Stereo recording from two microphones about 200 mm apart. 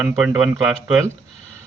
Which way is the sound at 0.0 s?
5° right (ahead or behind).